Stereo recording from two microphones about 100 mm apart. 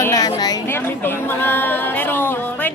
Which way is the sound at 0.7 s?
20° left (ahead or behind).